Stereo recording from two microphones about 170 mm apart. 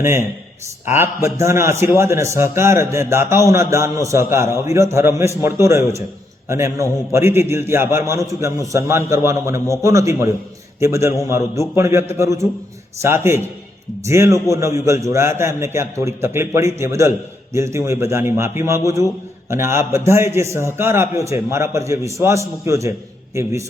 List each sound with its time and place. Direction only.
0.9 s a man's voice: 15° right (ahead or behind)